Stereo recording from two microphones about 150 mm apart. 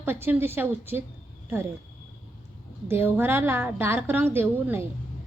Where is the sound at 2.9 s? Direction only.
15° right (ahead or behind).